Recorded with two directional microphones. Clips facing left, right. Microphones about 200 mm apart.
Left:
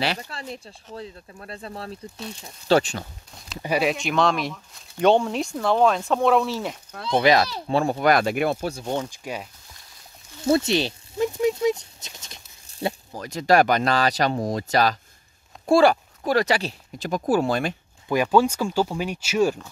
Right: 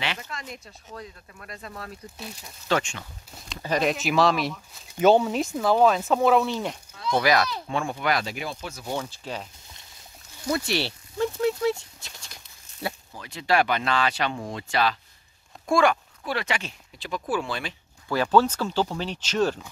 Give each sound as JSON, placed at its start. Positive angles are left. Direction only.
{"t": 0.0, "sound": "speech", "side_deg": 35}
{"t": 3.6, "sound": "speech", "side_deg": 10}
{"t": 3.9, "sound": "speech", "side_deg": -5}
{"t": 7.1, "sound": "speech", "side_deg": 25}
{"t": 8.9, "sound": "speech", "side_deg": 15}
{"t": 10.4, "sound": "a sound", "side_deg": 25}
{"t": 13.1, "sound": "speech", "side_deg": 40}
{"t": 18.0, "sound": "speech", "side_deg": 15}